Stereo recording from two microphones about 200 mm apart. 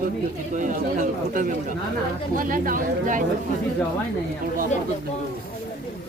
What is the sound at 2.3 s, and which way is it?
Speech, 45° right (ahead or behind).